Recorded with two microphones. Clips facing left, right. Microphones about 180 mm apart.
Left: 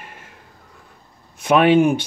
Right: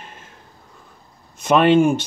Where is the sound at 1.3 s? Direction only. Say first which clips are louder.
Even; 10° left (ahead or behind).